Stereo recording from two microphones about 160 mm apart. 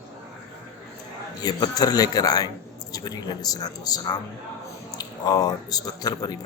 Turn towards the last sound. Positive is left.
turn(degrees=25)  # may be behind; listen again after turning